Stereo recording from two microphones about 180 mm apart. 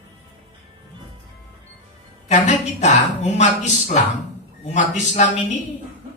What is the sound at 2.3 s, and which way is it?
A woman's voice, 40° left (ahead or behind).